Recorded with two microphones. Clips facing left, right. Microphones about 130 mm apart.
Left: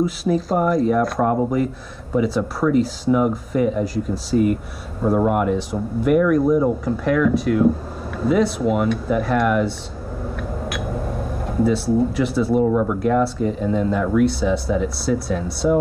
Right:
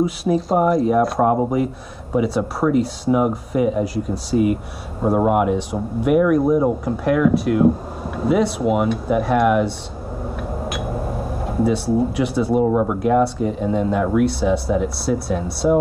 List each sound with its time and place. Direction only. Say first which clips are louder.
0.0 s speech: right 1 dB; centre (ahead or behind)
10.3 s a sound: right 1 dB; 5° right (ahead or behind)
12.6 s speech: right 1 dB; 15° right (ahead or behind)
13.0 s speech: right 1 dB; 5° right (ahead or behind)